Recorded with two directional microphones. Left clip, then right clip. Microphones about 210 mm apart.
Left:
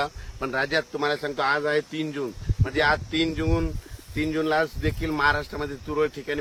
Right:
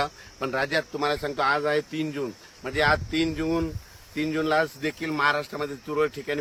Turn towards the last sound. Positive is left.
turn(degrees=-55)  # may be behind; listen again after turning